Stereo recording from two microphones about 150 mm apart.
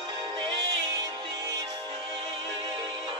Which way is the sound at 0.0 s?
30° right (ahead or behind).